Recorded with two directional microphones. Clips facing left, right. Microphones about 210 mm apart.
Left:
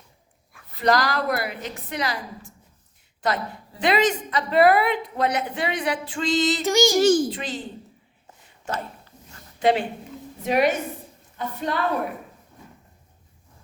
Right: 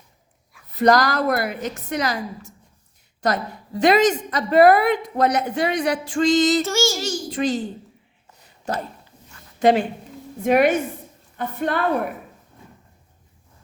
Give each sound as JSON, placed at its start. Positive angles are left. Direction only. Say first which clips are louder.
{"t": 0.8, "sound": "speech", "louder": "right 4 dB", "side_deg": -45}
{"t": 6.6, "sound": "child singing", "louder": "left 2 dB", "side_deg": 15}
{"t": 7.0, "sound": "a child's voice", "louder": "left 10 dB", "side_deg": 55}
{"t": 7.3, "sound": "speech", "louder": "right 8 dB", "side_deg": -45}
{"t": 8.7, "sound": "a woman's voice", "louder": "right 3 dB", "side_deg": -35}
{"t": 10.4, "sound": "a woman's voice", "louder": "right 4 dB", "side_deg": -55}